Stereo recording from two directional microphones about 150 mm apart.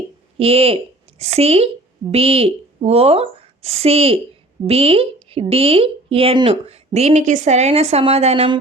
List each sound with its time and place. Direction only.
0.3 s a woman's voice: 40° right (ahead or behind)